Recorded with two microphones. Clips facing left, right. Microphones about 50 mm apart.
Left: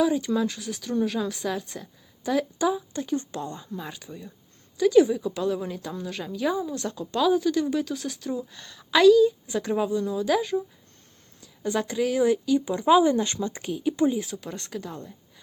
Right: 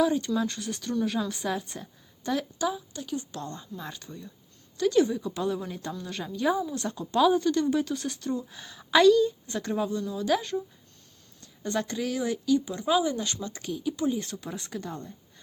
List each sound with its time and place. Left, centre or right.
0.0 s a woman's voice: centre
2.9 s speech: left
3.3 s speech: centre
12.9 s speech: left
13.5 s speech: centre
14.1 s speech: centre